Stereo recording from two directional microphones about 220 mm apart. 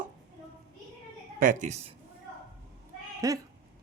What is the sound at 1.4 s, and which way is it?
Speech, 35° right (ahead or behind).